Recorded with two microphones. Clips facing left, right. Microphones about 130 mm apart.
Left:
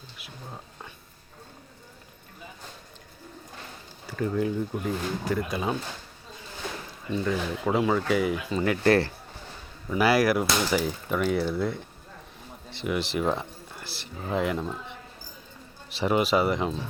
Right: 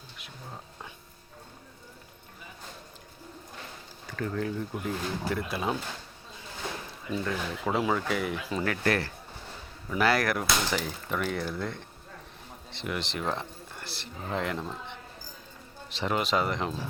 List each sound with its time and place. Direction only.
0.2 s a sound: 5° left (ahead or behind)
4.0 s speech: 10° left (ahead or behind)
4.7 s speech: centre (ahead or behind)
7.3 s speech: centre (ahead or behind)
8.8 s speech: 30° left (ahead or behind)
9.9 s speech: 5° left (ahead or behind)